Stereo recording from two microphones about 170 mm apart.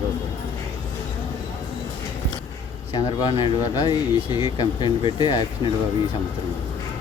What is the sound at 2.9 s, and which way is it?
Speech, 25° left (ahead or behind).